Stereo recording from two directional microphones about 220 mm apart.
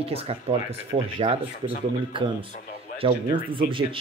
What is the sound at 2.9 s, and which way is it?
Speech, 25° right (ahead or behind).